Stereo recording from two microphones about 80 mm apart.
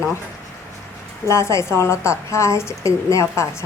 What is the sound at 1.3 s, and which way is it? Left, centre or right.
A woman's voice, left.